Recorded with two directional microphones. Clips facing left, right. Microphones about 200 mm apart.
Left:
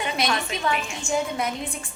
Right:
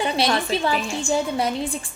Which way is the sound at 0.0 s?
35° right (ahead or behind).